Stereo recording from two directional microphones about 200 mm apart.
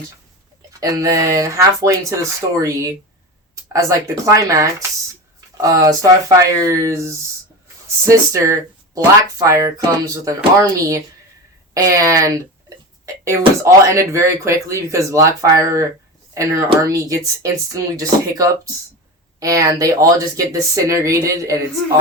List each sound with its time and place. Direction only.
0.7 s speech: 15° right (ahead or behind)